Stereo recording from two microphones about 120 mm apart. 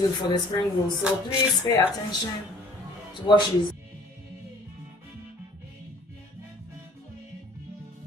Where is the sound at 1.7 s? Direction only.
25° left (ahead or behind).